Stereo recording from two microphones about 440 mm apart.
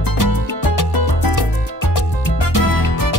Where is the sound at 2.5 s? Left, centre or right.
Left.